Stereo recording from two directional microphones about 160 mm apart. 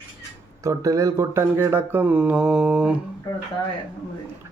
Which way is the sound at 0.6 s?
20° right (ahead or behind).